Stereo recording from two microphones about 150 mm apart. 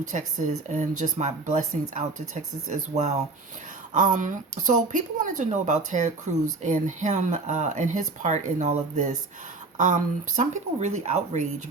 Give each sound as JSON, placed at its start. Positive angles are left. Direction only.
{"t": 0.1, "sound": "speech", "side_deg": -55}